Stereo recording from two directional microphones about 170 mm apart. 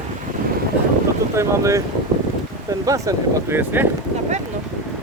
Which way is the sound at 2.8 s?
20° right (ahead or behind).